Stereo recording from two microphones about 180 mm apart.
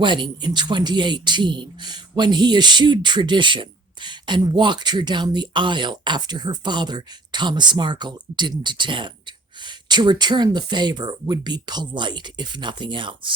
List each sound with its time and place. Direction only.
0.0 s speech: 25° right (ahead or behind)